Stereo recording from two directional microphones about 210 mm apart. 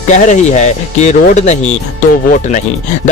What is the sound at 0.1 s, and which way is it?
Speech, 35° left (ahead or behind).